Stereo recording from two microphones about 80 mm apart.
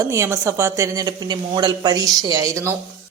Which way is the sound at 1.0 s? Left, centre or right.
Right.